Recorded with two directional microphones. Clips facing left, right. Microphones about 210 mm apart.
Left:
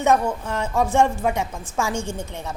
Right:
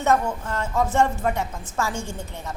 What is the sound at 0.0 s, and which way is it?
A woman's voice, 20° left (ahead or behind).